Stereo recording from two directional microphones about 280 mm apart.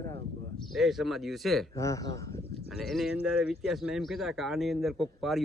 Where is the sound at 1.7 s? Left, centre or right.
Centre.